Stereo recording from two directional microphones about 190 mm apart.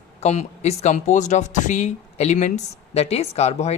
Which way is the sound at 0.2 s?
35° left (ahead or behind).